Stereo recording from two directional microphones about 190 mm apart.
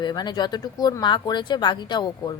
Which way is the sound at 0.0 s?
20° left (ahead or behind).